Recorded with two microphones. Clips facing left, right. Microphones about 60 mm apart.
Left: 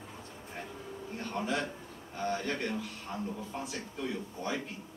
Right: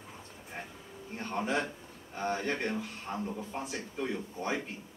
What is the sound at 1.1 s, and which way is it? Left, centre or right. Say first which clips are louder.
A man's voice: right 2 dB; right.